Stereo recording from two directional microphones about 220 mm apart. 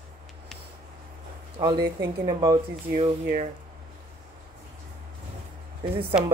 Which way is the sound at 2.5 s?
40° right (ahead or behind).